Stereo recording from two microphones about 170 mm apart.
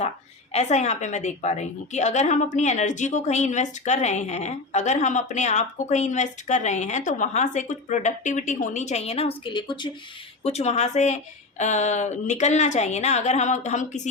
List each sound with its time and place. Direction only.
0.5 s a woman's voice: 40° left (ahead or behind)
10.4 s a woman's voice: 40° left (ahead or behind)